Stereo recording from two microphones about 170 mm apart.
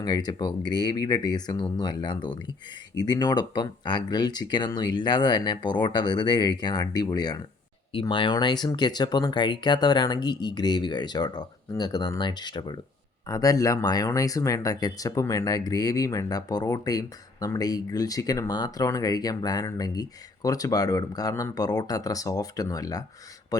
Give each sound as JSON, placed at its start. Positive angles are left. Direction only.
{"t": 0.0, "sound": "speech", "side_deg": 25}